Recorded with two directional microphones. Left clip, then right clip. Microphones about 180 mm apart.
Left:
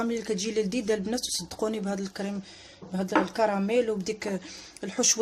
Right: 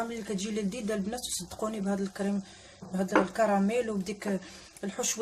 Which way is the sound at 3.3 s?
30° left (ahead or behind).